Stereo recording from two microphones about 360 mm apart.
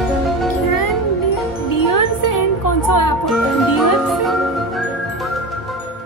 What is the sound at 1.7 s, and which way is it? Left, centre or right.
Music, left.